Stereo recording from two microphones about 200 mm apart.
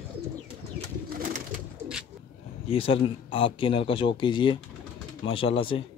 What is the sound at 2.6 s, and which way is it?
Speech, 30° left (ahead or behind).